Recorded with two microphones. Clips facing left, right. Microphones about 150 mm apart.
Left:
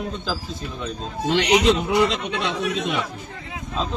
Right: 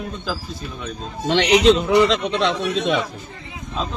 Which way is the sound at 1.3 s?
85° right.